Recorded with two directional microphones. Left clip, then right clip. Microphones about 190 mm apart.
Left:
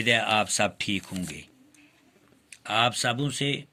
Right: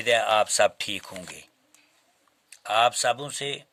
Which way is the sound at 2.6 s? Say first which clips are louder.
Right 3 dB; 55° right (ahead or behind).